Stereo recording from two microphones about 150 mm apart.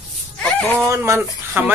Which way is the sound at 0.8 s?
20° right (ahead or behind).